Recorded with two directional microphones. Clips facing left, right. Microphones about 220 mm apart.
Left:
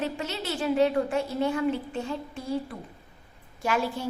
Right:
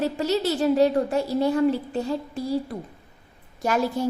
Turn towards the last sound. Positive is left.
turn(degrees=-40)  # may be behind; listen again after turning